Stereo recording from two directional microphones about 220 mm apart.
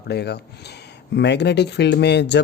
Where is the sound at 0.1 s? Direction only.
50° left (ahead or behind).